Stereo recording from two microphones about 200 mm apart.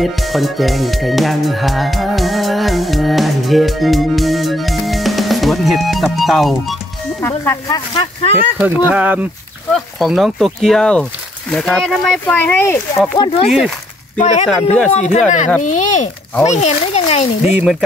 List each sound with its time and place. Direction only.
0.0 s speech: centre (ahead or behind)
7.2 s speech: 15° left (ahead or behind)
8.5 s speech: 5° right (ahead or behind); by 12.8 s 10° left (ahead or behind)
13.5 s speech: centre (ahead or behind)
14.1 s speech: 35° left (ahead or behind)
17.6 s speech: centre (ahead or behind)